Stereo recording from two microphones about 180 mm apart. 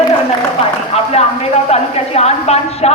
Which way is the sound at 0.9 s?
35° left (ahead or behind).